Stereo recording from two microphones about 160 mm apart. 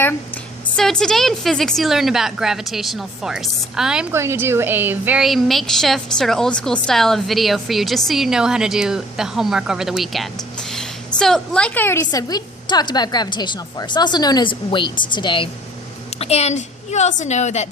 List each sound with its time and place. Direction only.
0.8 s a woman's voice: 5° left (ahead or behind)
4.1 s a woman's voice: 15° right (ahead or behind); by 15.4 s 30° left (ahead or behind)
16.1 s a woman's voice: 40° left (ahead or behind)